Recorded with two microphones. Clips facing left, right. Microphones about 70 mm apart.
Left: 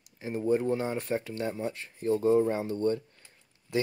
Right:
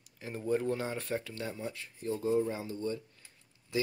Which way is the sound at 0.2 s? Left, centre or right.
Centre.